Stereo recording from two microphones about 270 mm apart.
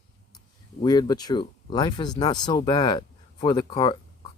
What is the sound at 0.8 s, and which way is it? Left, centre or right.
Speech, centre.